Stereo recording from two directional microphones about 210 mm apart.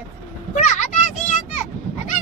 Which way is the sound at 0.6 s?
35° left (ahead or behind).